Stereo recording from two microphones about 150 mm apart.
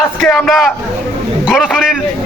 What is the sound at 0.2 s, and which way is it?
A man's voice, 5° left (ahead or behind).